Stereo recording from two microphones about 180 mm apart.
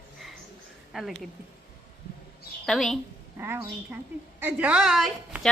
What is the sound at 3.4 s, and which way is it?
A woman's voice, 10° right (ahead or behind).